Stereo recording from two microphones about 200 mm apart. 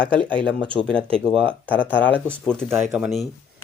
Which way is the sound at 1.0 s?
30° right (ahead or behind).